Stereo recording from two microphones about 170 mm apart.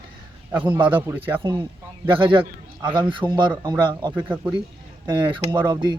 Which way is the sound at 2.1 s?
30° right (ahead or behind).